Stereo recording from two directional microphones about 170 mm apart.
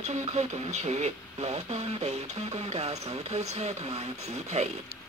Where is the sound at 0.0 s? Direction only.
40° right (ahead or behind).